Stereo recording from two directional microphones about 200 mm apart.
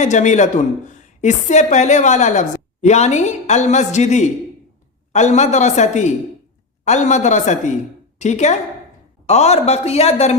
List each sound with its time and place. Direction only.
0.0 s a woman's voice: 35° left (ahead or behind)